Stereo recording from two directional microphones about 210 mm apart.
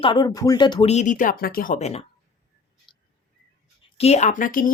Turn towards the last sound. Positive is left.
turn(degrees=40)  # may be behind; listen again after turning